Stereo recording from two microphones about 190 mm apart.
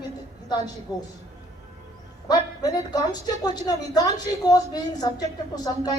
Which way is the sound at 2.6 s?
20° left (ahead or behind).